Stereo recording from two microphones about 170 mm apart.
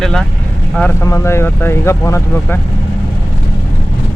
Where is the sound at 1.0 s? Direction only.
15° left (ahead or behind).